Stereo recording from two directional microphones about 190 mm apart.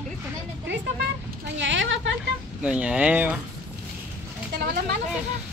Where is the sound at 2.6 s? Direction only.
5° right (ahead or behind).